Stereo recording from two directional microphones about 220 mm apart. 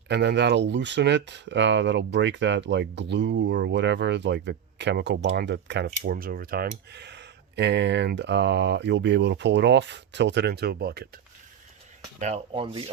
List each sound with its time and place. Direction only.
0.1 s speech: 50° right (ahead or behind)
12.2 s speech: 25° right (ahead or behind)